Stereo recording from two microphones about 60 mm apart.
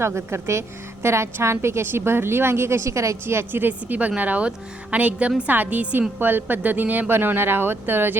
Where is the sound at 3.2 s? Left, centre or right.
Right.